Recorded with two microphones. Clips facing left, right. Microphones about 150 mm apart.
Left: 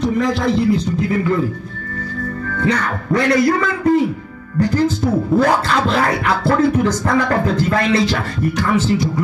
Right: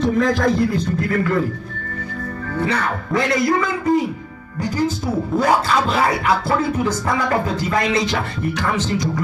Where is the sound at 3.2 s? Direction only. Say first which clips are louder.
Left 4 dB; 25° right (ahead or behind).